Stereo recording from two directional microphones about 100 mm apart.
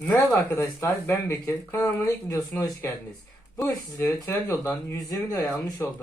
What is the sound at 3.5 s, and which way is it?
Speech, 40° left (ahead or behind).